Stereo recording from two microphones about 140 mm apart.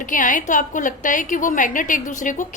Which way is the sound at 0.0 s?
70° left (ahead or behind).